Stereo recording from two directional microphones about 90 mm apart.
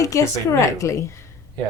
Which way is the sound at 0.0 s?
40° left (ahead or behind).